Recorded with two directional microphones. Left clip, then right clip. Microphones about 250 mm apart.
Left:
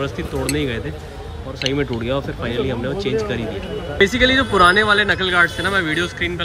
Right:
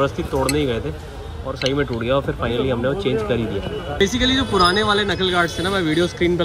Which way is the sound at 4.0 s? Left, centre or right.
Centre.